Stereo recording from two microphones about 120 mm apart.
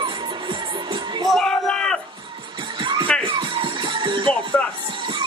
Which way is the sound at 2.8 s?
45° right (ahead or behind).